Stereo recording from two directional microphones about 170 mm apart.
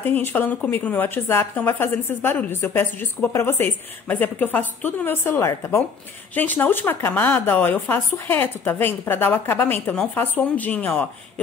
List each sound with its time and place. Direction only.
0.0 s a woman's voice: 10° left (ahead or behind)